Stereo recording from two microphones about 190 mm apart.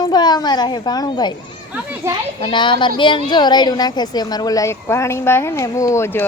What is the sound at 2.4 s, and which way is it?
A woman's voice, 25° left (ahead or behind).